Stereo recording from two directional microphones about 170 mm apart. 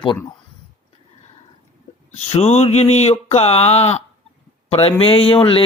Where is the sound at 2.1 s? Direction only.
40° left (ahead or behind).